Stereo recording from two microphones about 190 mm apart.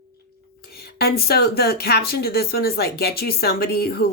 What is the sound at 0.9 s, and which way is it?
Speech, 55° left (ahead or behind).